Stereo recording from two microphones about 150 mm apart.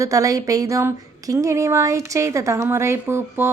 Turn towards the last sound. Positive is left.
turn(degrees=-15)  # may be behind; listen again after turning